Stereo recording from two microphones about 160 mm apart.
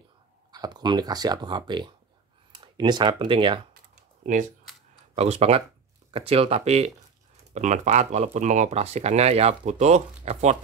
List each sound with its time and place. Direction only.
0.5 s speech: 25° right (ahead or behind)
5.1 s speech: 40° right (ahead or behind)